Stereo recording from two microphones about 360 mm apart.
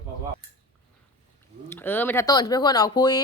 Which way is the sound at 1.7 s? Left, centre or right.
Centre.